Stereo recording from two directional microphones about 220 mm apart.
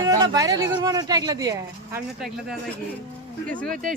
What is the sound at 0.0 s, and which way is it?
Speech, 15° right (ahead or behind).